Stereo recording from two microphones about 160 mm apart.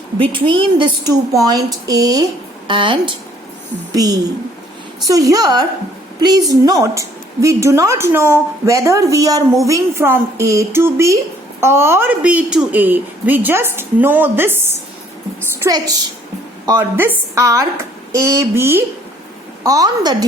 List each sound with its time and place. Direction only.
0.2 s a woman's voice: 30° right (ahead or behind); by 14.8 s 15° right (ahead or behind)
15.4 s a sound: 20° right (ahead or behind)
16.6 s a woman's voice: 15° right (ahead or behind)